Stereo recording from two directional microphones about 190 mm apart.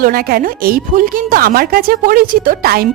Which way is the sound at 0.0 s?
50° right (ahead or behind).